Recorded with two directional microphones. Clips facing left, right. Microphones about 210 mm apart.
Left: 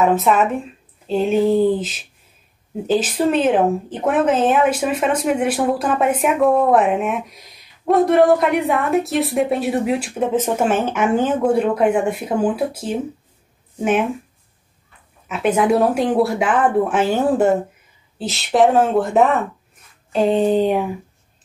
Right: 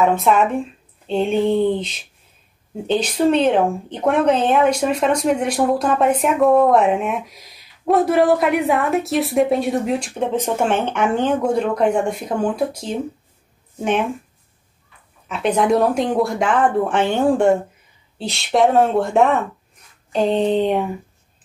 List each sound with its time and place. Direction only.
0.0 s speech: centre (ahead or behind)
15.2 s speech: 5° left (ahead or behind)